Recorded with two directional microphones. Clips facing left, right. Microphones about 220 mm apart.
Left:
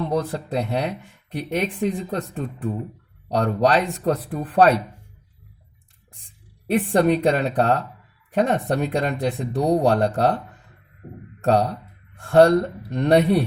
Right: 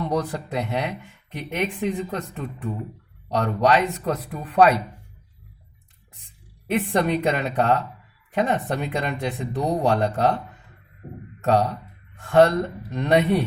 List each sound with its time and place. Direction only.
0.0 s speech: 30° left (ahead or behind)
7.0 s speech: 35° left (ahead or behind)
11.4 s speech: 35° left (ahead or behind)